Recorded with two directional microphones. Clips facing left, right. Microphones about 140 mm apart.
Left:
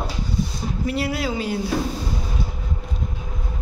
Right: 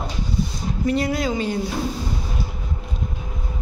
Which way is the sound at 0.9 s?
5° left (ahead or behind).